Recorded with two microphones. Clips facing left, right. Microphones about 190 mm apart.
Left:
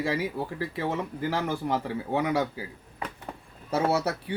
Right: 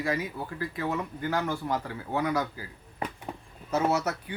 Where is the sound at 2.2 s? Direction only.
15° left (ahead or behind).